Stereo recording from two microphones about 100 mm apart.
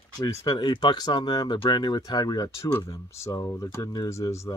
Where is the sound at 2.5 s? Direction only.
30° left (ahead or behind).